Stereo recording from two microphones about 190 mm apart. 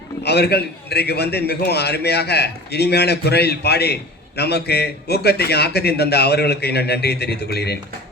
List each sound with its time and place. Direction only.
0.2 s a man's voice: 60° left (ahead or behind)